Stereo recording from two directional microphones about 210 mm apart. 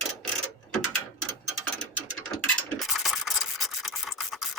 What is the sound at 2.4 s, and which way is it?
Rub, centre (ahead or behind).